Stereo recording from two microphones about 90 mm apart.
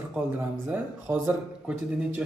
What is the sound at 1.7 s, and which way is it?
Speech, 10° right (ahead or behind).